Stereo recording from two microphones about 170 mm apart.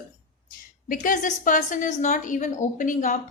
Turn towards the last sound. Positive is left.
turn(degrees=50)  # may be behind; listen again after turning